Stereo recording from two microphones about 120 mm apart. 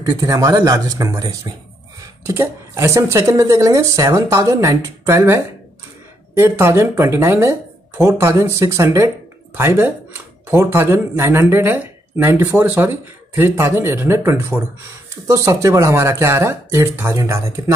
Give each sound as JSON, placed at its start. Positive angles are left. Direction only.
{"t": 0.1, "sound": "speech", "side_deg": -30}